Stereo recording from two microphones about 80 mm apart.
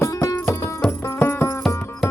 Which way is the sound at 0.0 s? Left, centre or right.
Left.